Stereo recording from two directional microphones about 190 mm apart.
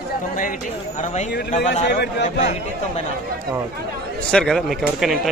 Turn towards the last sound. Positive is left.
turn(degrees=0)  # may be behind; listen again after turning